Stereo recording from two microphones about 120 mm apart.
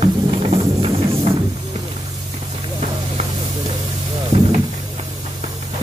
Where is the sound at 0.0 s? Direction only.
55° right (ahead or behind).